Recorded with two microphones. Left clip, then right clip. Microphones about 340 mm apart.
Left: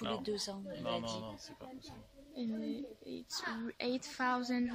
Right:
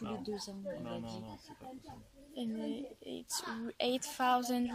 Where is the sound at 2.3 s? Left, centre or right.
Centre.